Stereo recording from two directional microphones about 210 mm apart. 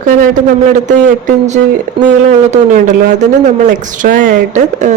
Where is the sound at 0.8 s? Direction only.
35° right (ahead or behind).